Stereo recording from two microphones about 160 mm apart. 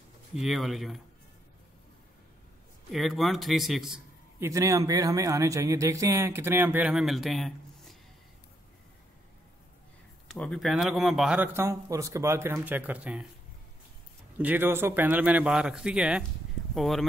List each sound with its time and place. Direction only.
0.4 s a man's voice: centre (ahead or behind)
2.9 s a man's voice: centre (ahead or behind)
4.4 s speech: 20° right (ahead or behind); by 8.0 s centre (ahead or behind)
10.2 s speech: 5° left (ahead or behind)
14.4 s speech: 10° right (ahead or behind)